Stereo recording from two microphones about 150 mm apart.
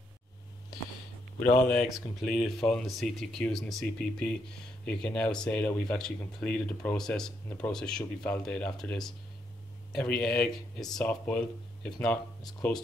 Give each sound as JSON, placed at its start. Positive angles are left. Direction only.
{"t": 1.4, "sound": "speech", "side_deg": 15}
{"t": 1.7, "sound": "speech", "side_deg": 0}